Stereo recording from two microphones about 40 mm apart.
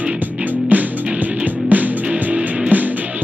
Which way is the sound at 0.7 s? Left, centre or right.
Right.